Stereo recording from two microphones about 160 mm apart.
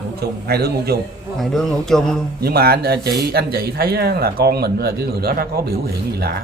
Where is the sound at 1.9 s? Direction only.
5° left (ahead or behind).